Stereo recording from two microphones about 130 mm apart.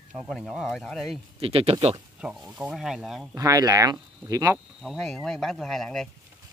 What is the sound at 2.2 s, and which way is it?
Speech, 5° right (ahead or behind).